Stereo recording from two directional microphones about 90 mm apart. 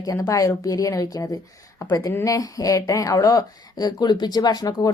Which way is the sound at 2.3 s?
40° left (ahead or behind).